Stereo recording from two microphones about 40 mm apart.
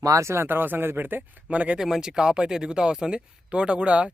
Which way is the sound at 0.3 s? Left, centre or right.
Right.